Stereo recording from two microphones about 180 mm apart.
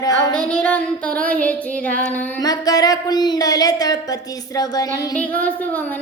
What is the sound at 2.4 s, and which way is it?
A woman's voice, 20° left (ahead or behind).